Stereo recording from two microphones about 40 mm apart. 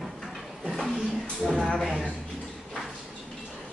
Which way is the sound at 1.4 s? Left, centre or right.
Centre.